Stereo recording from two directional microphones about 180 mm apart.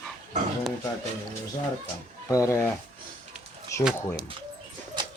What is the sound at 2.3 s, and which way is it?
Speech, 20° left (ahead or behind).